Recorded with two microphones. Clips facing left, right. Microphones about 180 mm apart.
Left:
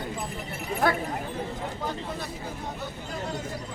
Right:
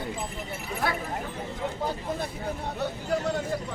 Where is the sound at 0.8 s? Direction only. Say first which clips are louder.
Left 5 dB; 50° left (ahead or behind).